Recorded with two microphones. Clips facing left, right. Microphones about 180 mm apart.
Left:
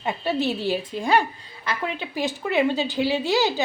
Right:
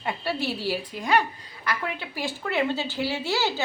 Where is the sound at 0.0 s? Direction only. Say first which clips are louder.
Left 4 dB; 20° left (ahead or behind).